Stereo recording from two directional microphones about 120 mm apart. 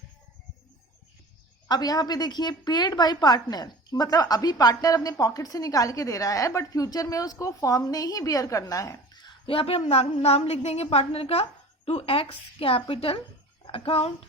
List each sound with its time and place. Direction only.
1.6 s a woman's voice: 30° left (ahead or behind); by 14.3 s 55° left (ahead or behind)